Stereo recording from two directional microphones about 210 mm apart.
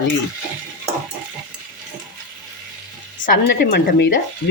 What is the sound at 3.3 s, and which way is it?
Speech, 50° left (ahead or behind).